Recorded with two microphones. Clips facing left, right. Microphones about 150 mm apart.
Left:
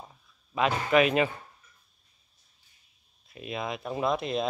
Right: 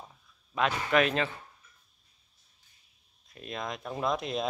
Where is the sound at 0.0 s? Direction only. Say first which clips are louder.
Left 2 dB; 5° left (ahead or behind).